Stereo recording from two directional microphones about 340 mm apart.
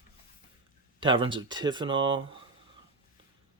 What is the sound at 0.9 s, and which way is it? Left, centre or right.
Speech, centre.